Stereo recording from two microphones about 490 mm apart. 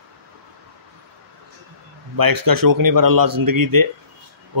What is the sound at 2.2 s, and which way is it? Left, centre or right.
Speech, right.